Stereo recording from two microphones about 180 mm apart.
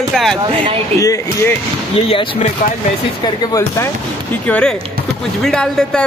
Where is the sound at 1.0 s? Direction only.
20° left (ahead or behind).